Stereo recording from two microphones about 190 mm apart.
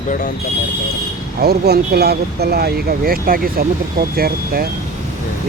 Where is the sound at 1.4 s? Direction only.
55° right (ahead or behind).